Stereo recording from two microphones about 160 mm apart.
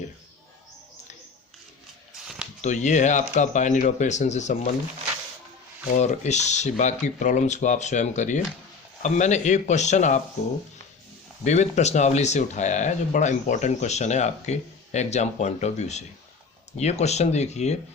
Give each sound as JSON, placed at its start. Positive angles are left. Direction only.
{"t": 2.6, "sound": "speech", "side_deg": 50}
{"t": 5.9, "sound": "speech", "side_deg": 45}
{"t": 11.4, "sound": "speech", "side_deg": 45}